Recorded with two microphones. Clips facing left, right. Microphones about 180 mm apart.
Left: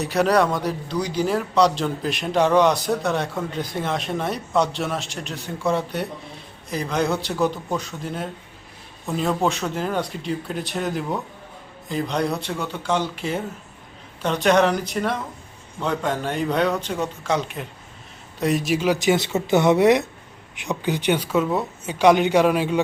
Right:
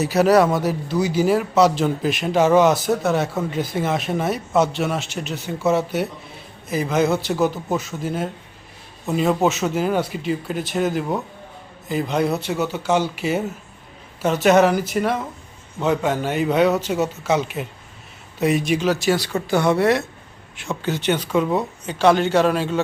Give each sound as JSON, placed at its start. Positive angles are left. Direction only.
{"t": 0.0, "sound": "a man's voice", "side_deg": -5}
{"t": 18.9, "sound": "speech", "side_deg": 20}
{"t": 21.9, "sound": "speech", "side_deg": 15}